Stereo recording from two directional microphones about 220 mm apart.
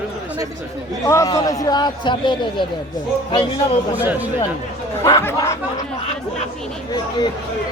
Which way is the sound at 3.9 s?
10° right (ahead or behind).